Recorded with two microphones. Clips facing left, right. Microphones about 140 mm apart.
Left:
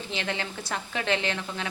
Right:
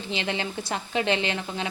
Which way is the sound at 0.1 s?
20° right (ahead or behind).